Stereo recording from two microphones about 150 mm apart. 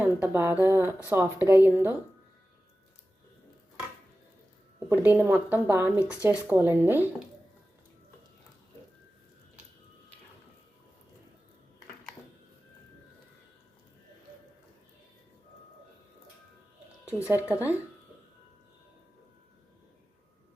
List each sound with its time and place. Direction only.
0.0 s speech: 10° right (ahead or behind)
4.9 s speech: 10° right (ahead or behind)
17.2 s speech: 10° right (ahead or behind)